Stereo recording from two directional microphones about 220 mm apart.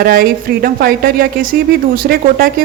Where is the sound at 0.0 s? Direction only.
40° right (ahead or behind).